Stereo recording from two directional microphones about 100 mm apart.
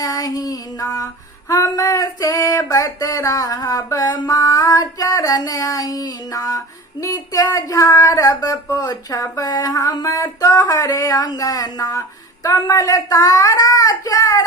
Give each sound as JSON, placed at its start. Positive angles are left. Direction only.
{"t": 0.0, "sound": "female singing", "side_deg": 35}
{"t": 1.5, "sound": "speech", "side_deg": 35}
{"t": 4.1, "sound": "female singing", "side_deg": 35}
{"t": 7.0, "sound": "speech", "side_deg": 35}